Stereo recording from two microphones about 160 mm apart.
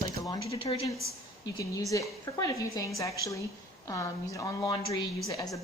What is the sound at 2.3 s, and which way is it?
A woman's voice, 20° left (ahead or behind).